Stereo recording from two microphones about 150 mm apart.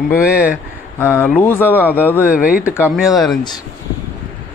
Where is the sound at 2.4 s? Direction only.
65° left (ahead or behind).